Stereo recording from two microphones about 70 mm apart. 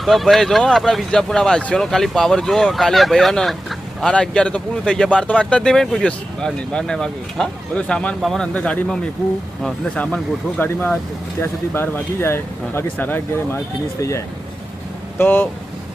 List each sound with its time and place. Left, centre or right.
0.0 s speech: centre
10.6 s speech: left
14.0 s speech: left
15.2 s speech: left